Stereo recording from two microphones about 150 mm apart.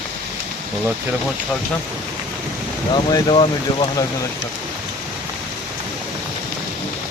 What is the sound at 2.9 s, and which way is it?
Speech, 30° left (ahead or behind).